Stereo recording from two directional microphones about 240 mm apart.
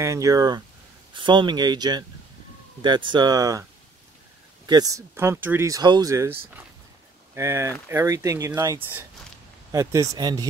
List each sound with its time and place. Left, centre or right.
0.0 s speech: centre
4.6 s speech: centre